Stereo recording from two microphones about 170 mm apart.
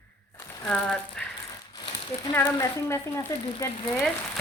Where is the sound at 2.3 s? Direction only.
15° left (ahead or behind).